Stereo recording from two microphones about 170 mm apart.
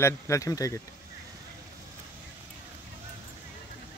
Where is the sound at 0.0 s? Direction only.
20° left (ahead or behind).